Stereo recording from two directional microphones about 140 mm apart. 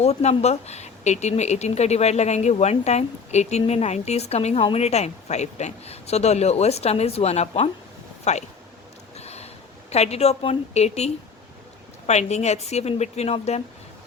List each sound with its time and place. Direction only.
0.0 s speech: 50° left (ahead or behind)
9.1 s a sound: 50° left (ahead or behind)
9.9 s speech: 50° left (ahead or behind)